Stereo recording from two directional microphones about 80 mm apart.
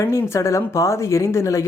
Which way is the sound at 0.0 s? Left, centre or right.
Left.